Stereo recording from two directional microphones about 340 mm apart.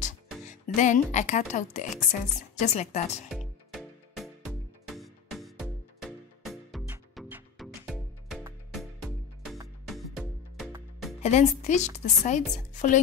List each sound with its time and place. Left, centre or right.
0.0 s speech: left
3.3 s music: centre
11.2 s speech: left